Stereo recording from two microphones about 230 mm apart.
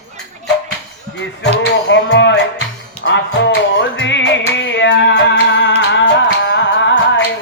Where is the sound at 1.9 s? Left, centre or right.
Left.